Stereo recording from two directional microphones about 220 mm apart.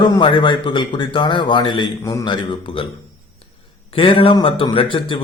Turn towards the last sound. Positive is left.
turn(degrees=25)  # may be behind; listen again after turning